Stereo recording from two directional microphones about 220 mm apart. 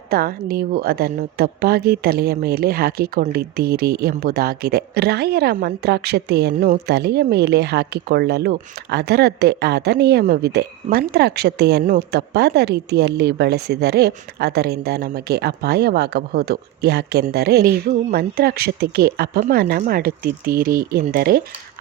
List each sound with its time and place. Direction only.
0.1 s a woman's voice: 45° right (ahead or behind)